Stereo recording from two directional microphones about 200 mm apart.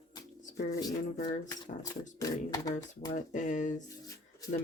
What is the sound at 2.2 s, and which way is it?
Speech, 20° left (ahead or behind).